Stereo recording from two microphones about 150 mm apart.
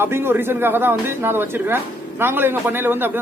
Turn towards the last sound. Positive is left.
turn(degrees=-15)  # may be behind; listen again after turning